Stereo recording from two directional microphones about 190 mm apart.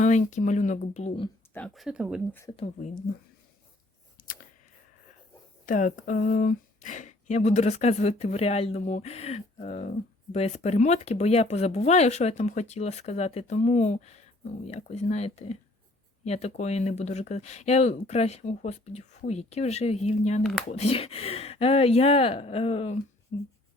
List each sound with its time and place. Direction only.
0.0 s speech: 40° left (ahead or behind)
1.5 s speech: 5° left (ahead or behind)
2.3 s speech: 15° left (ahead or behind)
2.6 s speech: 40° left (ahead or behind)
4.2 s a sound: 50° left (ahead or behind)
5.6 s speech: 45° left (ahead or behind)
20.4 s speech: centre (ahead or behind)
20.7 s speech: 35° left (ahead or behind)